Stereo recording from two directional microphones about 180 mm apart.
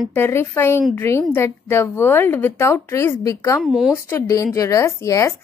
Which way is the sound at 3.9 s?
15° left (ahead or behind).